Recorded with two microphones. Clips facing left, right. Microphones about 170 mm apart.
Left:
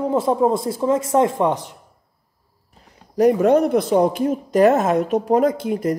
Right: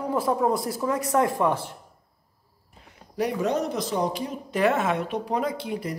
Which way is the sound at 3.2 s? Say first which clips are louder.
Left 11 dB; 50° left (ahead or behind).